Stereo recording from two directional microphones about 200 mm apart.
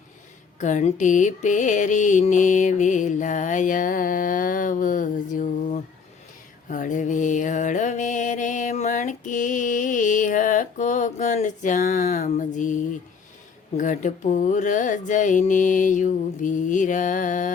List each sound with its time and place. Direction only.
0.6 s music: 35° left (ahead or behind)
6.7 s mantra: 40° left (ahead or behind)
13.7 s music: 40° left (ahead or behind)